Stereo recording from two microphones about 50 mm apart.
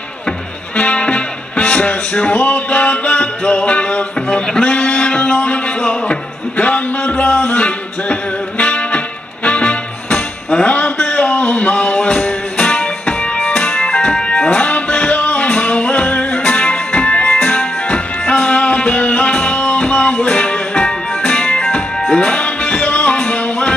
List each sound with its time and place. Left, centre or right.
0.7 s music: left
4.6 s a sound: left
13.6 s music: left